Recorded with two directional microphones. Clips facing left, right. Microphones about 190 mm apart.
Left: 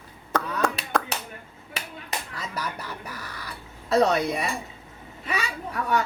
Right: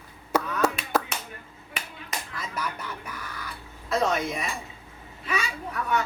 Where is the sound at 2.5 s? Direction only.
35° left (ahead or behind).